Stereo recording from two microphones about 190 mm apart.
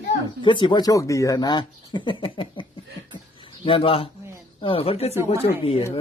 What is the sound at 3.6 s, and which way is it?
Speech, 30° left (ahead or behind).